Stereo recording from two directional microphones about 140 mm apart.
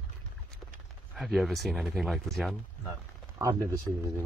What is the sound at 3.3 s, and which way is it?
Speech, 20° right (ahead or behind).